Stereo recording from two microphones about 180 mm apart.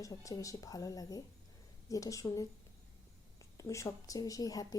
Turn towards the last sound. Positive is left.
turn(degrees=20)  # may be behind; listen again after turning